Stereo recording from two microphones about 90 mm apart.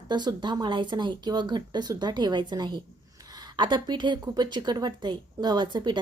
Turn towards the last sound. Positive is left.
turn(degrees=-60)  # may be behind; listen again after turning